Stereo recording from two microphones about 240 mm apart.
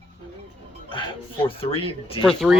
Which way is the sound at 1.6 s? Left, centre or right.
Left.